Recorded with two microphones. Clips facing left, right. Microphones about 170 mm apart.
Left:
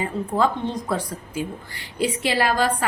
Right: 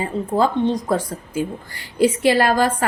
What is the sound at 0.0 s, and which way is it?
A woman's voice, 35° right (ahead or behind).